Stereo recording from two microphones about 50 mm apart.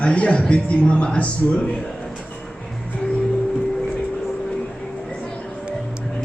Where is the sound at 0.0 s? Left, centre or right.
Left.